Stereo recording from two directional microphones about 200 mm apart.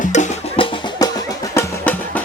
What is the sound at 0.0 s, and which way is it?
Music, 35° left (ahead or behind).